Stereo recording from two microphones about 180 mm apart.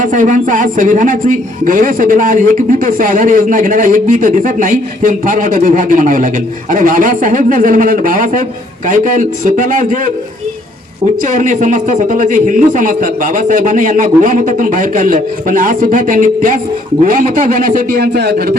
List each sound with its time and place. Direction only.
0.0 s a man's voice: 45° right (ahead or behind)
11.3 s a man's voice: 45° right (ahead or behind); by 18.5 s 60° right (ahead or behind)